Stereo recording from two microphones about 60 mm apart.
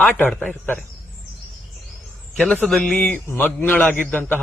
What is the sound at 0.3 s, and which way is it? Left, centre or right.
Speech, left.